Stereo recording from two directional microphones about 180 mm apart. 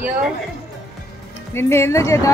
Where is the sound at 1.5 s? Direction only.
15° left (ahead or behind).